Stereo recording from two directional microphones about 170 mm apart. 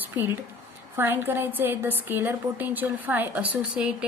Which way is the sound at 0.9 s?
10° right (ahead or behind).